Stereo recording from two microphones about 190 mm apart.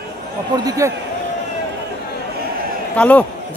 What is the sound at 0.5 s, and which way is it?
Speech, 20° right (ahead or behind).